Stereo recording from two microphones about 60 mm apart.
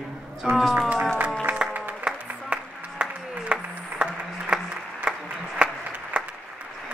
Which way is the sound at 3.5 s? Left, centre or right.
Right.